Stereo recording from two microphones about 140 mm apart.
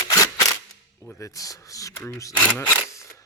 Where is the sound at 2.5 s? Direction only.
15° left (ahead or behind).